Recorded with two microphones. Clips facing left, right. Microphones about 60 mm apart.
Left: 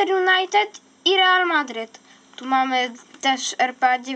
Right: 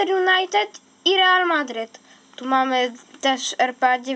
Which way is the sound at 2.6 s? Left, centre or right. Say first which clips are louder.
Right 2 dB; centre.